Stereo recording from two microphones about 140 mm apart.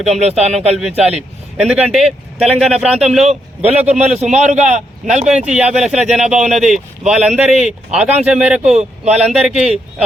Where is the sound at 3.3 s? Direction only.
50° right (ahead or behind).